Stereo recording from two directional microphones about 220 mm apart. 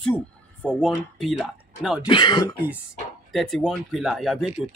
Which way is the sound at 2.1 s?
20° left (ahead or behind).